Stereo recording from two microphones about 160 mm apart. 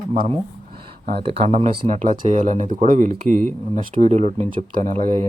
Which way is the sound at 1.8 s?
55° right (ahead or behind).